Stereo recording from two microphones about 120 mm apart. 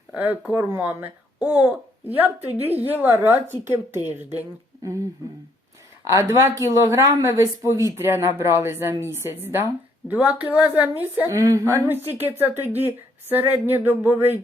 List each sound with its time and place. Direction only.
0.1 s speech: 15° right (ahead or behind)
6.1 s a woman's voice: 25° right (ahead or behind)
11.3 s a woman's voice: 25° right (ahead or behind)
11.9 s speech: 15° right (ahead or behind)